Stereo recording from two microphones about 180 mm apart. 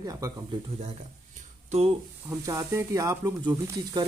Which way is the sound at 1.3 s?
35° right (ahead or behind).